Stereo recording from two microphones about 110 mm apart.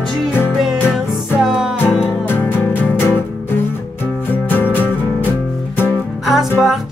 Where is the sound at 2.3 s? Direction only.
20° left (ahead or behind).